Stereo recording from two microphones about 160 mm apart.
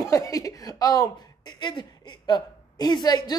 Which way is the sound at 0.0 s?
20° left (ahead or behind).